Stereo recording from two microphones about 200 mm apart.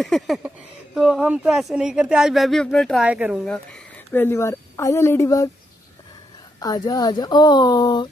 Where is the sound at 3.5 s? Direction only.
5° left (ahead or behind).